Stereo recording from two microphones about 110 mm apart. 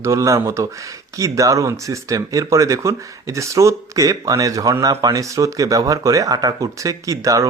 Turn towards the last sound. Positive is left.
turn(degrees=-30)  # may be behind; listen again after turning